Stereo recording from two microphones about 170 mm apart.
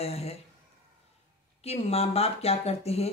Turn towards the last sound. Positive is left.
turn(degrees=35)  # may be behind; listen again after turning